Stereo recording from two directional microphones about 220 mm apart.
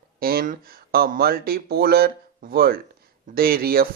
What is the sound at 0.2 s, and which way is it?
Speech, 40° right (ahead or behind).